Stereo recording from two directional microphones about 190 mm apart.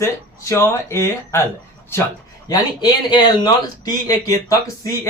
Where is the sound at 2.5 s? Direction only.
25° left (ahead or behind).